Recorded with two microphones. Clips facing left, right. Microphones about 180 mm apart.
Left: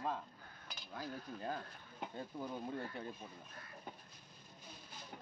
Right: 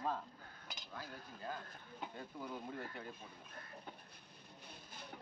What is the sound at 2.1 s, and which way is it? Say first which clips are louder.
Speech: left 4 dB; 30° left (ahead or behind).